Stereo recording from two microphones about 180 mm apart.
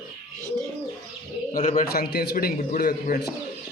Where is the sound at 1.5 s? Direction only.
45° left (ahead or behind).